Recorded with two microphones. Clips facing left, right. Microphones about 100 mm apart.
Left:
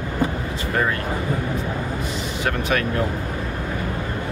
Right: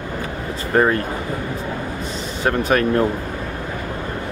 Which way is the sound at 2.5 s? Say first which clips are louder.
Right 5 dB; 40° right (ahead or behind).